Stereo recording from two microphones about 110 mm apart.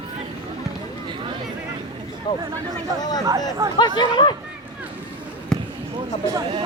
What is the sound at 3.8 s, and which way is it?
Speech, 45° left (ahead or behind).